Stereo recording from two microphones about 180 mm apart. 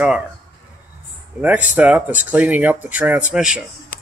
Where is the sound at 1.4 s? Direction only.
10° right (ahead or behind).